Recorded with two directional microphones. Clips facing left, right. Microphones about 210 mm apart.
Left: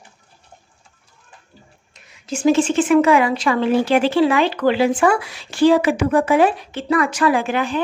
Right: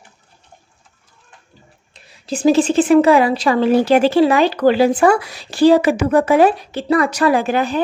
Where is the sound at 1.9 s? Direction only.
35° right (ahead or behind).